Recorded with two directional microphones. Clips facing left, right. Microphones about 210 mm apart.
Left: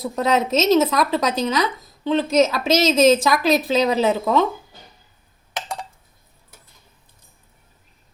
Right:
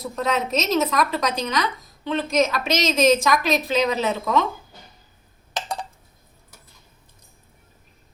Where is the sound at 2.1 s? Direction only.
30° left (ahead or behind).